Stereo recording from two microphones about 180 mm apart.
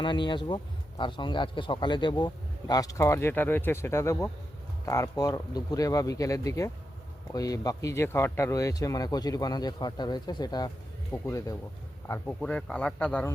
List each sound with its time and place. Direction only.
0.0 s speech: 25° left (ahead or behind); by 13.3 s 5° left (ahead or behind)